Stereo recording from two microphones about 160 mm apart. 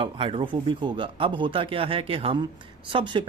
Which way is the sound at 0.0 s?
35° right (ahead or behind).